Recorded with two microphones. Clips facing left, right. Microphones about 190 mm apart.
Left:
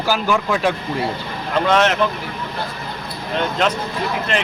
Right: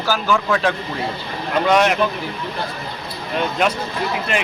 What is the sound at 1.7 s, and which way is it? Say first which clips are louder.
Speech: right 1 dB; 10° right (ahead or behind).